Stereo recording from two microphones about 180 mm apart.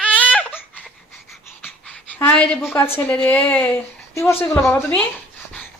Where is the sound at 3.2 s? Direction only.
5° left (ahead or behind).